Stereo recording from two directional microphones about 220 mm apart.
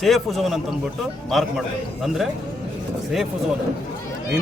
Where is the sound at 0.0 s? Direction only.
Centre (ahead or behind).